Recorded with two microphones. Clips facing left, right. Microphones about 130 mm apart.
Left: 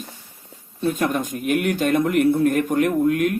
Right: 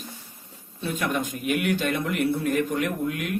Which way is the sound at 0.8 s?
40° left (ahead or behind).